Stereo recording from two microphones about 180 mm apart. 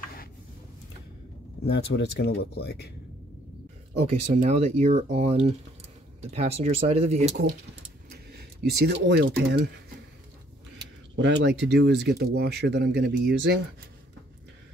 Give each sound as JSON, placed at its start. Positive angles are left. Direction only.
{"t": 1.7, "sound": "speech", "side_deg": 65}
{"t": 4.4, "sound": "speech", "side_deg": -40}
{"t": 8.3, "sound": "speech", "side_deg": -65}
{"t": 11.1, "sound": "speech", "side_deg": -80}